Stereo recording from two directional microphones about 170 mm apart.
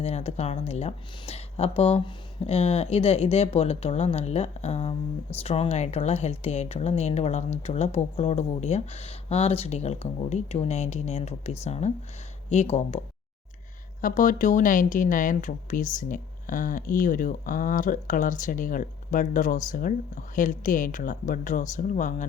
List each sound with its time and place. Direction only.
0.0 s speech: 35° left (ahead or behind)
14.0 s speech: 50° left (ahead or behind)